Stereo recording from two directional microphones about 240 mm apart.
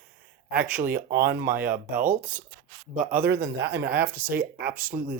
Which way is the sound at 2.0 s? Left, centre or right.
Centre.